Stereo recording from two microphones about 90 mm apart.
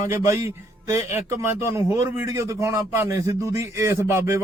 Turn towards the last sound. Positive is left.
turn(degrees=-30)  # may be behind; listen again after turning